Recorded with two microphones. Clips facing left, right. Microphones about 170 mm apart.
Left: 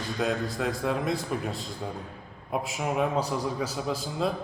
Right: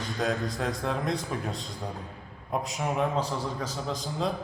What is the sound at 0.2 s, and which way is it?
A man's voice, centre (ahead or behind).